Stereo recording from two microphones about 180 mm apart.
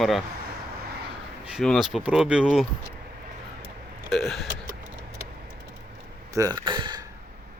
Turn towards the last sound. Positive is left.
turn(degrees=-25)  # may be behind; listen again after turning